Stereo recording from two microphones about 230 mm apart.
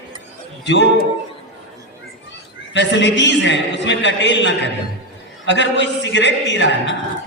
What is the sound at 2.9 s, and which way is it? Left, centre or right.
A man's voice, left.